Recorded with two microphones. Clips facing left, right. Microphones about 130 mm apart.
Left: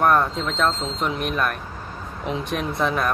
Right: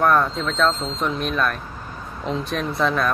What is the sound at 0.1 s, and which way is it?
Speech, 20° left (ahead or behind).